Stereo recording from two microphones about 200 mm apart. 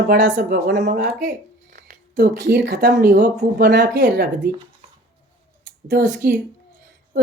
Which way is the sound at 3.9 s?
60° right (ahead or behind).